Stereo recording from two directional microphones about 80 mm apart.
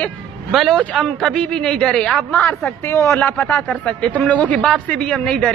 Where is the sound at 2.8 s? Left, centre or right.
Left.